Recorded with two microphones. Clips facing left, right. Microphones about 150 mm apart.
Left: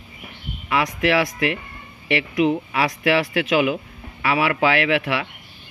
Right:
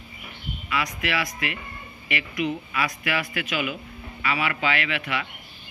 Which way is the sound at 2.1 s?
75° left (ahead or behind).